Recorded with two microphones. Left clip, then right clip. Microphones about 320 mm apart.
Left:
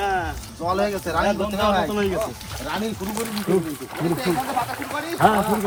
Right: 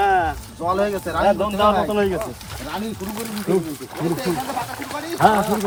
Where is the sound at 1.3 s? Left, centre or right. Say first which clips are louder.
Right 5 dB; right.